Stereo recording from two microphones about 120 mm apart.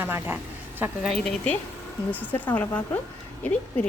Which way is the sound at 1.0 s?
5° left (ahead or behind).